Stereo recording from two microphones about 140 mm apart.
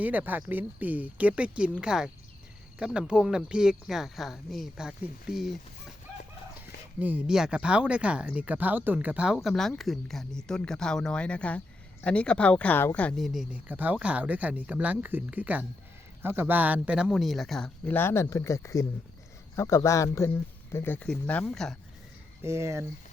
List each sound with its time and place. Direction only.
0.0 s speech: 10° right (ahead or behind)
7.0 s speech: 10° right (ahead or behind)
17.9 s speech: 15° left (ahead or behind)
22.4 s speech: 20° right (ahead or behind)